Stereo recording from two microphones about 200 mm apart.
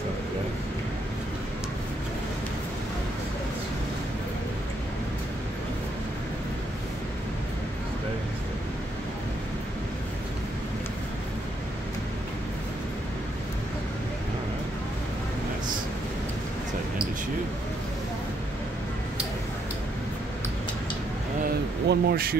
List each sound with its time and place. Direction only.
21.8 s speech: 50° right (ahead or behind)